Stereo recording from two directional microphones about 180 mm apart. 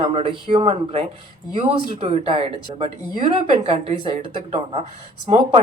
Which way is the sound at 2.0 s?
30° right (ahead or behind).